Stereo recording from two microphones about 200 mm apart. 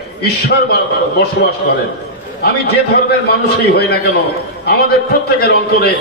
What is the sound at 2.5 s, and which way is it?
Speech, 55° left (ahead or behind).